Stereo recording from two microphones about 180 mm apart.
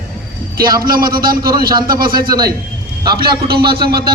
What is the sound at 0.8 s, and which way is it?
A man's voice, 55° right (ahead or behind).